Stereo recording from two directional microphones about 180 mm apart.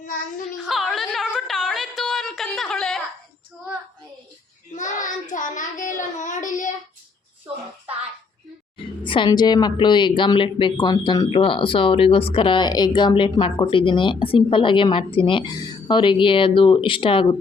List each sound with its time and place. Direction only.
0.7 s a sound: centre (ahead or behind)
4.7 s child singing: 45° left (ahead or behind)
8.8 s speech: 25° left (ahead or behind)